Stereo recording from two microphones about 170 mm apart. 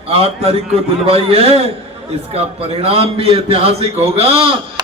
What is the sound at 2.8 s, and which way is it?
A man's voice, 35° right (ahead or behind).